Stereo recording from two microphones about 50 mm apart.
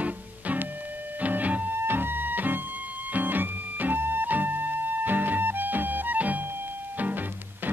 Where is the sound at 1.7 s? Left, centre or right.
Right.